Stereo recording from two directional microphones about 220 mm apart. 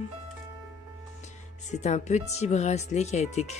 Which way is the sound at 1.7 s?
30° left (ahead or behind).